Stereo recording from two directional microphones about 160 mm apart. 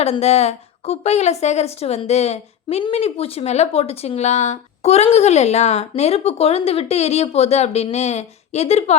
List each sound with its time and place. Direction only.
0.0 s a woman's voice: 40° left (ahead or behind)